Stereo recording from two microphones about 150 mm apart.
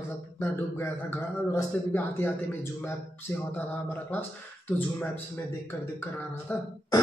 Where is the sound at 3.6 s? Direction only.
10° left (ahead or behind).